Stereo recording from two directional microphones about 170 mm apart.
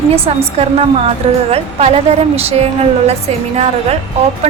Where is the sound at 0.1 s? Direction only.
35° right (ahead or behind).